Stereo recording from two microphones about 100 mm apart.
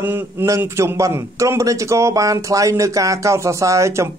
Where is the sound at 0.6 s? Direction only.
25° right (ahead or behind).